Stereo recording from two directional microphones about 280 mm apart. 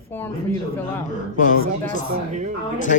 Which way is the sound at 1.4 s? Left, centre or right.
Left.